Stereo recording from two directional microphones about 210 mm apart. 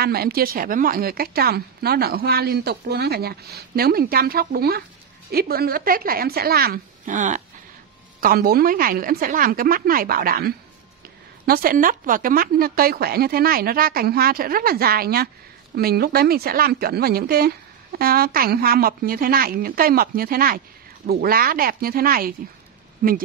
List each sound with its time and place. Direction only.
0.0 s a woman's voice: 45° right (ahead or behind)